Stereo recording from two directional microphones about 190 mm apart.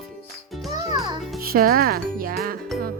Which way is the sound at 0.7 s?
20° right (ahead or behind).